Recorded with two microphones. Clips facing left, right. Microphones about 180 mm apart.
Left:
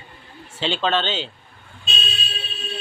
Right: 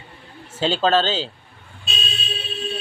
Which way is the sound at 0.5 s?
40° right (ahead or behind).